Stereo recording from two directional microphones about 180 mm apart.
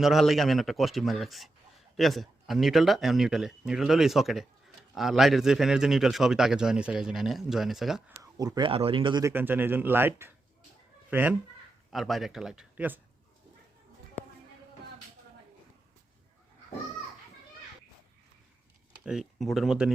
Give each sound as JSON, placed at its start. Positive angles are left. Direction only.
{"t": 0.0, "sound": "a man's voice", "side_deg": 0}
{"t": 8.2, "sound": "speech", "side_deg": -20}
{"t": 9.3, "sound": "a man's voice", "side_deg": -10}
{"t": 19.0, "sound": "a man's voice", "side_deg": 0}